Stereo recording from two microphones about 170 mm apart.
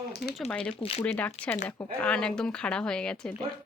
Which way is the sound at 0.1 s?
70° left (ahead or behind).